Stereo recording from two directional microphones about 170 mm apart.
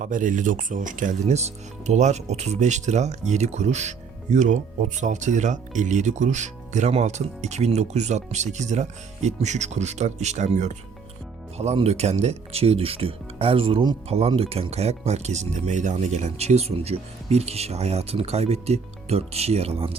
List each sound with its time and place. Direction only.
0.0 s speech: 50° right (ahead or behind)